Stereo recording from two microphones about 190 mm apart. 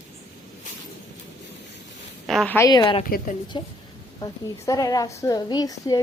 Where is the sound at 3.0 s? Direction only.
50° left (ahead or behind).